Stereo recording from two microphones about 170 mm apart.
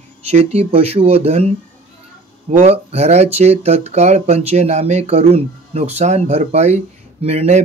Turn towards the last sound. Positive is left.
turn(degrees=-35)  # may be behind; listen again after turning